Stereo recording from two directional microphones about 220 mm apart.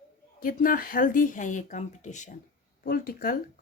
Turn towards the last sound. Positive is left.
turn(degrees=40)  # may be behind; listen again after turning